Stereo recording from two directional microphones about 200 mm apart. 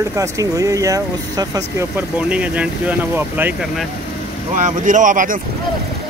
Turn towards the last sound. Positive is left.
turn(degrees=-40)  # may be behind; listen again after turning